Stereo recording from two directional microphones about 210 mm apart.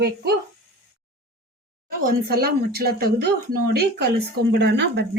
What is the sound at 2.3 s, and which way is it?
Speech, 45° right (ahead or behind).